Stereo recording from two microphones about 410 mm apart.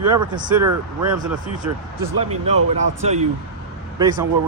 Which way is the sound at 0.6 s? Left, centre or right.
Right.